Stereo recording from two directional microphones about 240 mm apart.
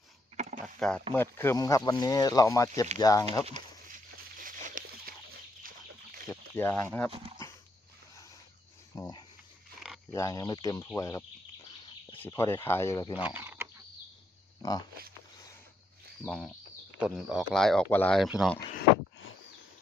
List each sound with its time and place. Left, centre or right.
0.3 s a sound: right
0.6 s a sound: centre
1.1 s speech: centre
4.4 s a sound: right
6.2 s speech: centre
7.1 s speech: right
9.0 s speech: centre
12.2 s speech: centre
13.1 s cricket: centre
14.6 s speech: centre
16.2 s speech: centre